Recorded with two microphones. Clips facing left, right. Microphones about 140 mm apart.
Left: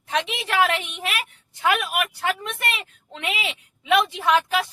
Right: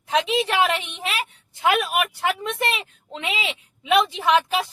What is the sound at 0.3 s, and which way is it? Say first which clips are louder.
A woman's voice: right 2 dB; 20° right (ahead or behind).